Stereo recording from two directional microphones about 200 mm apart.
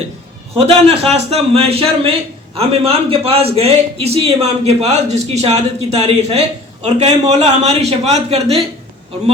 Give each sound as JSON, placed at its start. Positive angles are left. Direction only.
{"t": 0.5, "sound": "a man's voice", "side_deg": -30}